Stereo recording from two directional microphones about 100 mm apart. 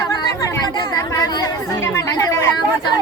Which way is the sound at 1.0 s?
35° left (ahead or behind).